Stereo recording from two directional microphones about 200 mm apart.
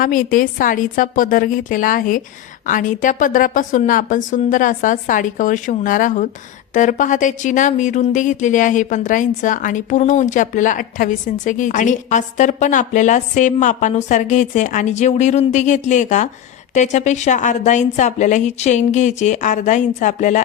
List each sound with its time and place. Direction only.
0.0 s a woman's voice: 45° left (ahead or behind)